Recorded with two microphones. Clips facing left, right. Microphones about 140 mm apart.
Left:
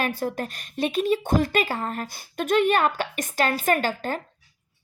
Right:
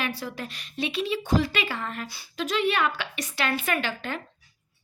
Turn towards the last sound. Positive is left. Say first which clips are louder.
# left 4 dB
turn(degrees=40)  # may be behind; listen again after turning